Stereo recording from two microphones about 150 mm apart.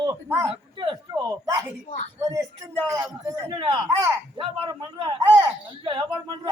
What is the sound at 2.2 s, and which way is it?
A man's voice, 20° right (ahead or behind).